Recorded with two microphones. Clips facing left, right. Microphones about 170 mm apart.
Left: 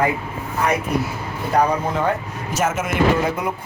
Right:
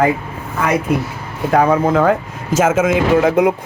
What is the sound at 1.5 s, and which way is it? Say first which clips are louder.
Speech: right 6 dB; 90° right.